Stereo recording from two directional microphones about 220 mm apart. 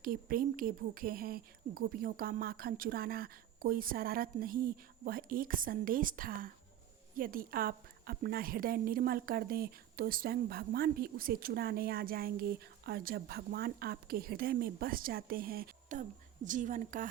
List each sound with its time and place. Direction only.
0.0 s a woman's voice: 40° right (ahead or behind)